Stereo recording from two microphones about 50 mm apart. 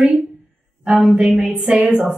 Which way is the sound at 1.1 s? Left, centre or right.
Centre.